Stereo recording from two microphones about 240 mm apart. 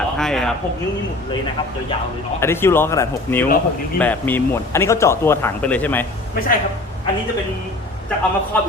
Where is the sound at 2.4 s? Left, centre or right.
Centre.